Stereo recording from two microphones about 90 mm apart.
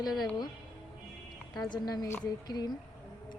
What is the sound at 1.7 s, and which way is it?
A woman's voice, 50° left (ahead or behind).